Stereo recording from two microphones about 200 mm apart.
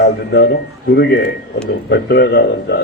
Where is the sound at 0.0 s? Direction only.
55° left (ahead or behind).